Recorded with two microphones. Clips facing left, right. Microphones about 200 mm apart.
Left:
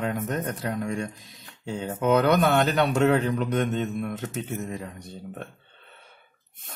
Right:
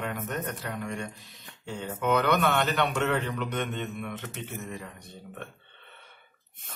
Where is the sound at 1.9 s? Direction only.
40° left (ahead or behind).